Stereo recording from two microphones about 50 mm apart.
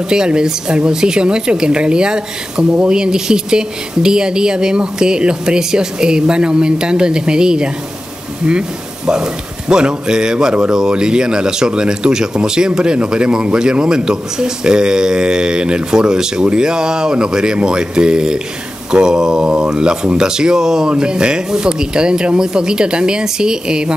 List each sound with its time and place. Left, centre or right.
0.1 s speech: centre